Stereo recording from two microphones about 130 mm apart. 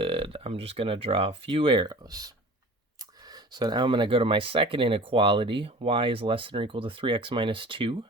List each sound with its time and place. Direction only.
0.0 s speech: 45° right (ahead or behind)